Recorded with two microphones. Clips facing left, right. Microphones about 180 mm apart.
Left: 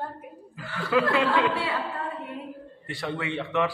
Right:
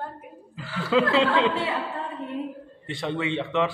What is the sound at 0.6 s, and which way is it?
A man's voice, 20° right (ahead or behind).